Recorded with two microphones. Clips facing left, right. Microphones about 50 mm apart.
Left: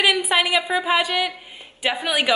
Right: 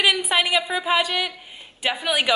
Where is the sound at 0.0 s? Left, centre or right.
Centre.